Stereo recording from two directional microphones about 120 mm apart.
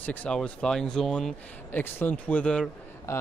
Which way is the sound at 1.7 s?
15° left (ahead or behind).